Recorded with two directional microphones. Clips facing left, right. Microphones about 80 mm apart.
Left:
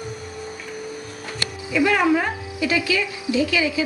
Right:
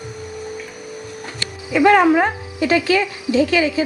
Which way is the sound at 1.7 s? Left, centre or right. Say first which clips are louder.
Right 6 dB; right.